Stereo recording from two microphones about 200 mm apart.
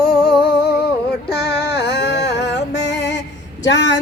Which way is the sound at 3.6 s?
65° left (ahead or behind).